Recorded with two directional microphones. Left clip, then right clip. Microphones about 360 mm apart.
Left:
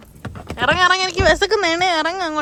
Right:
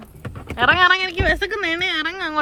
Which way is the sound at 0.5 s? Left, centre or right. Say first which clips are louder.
Right 1 dB; centre.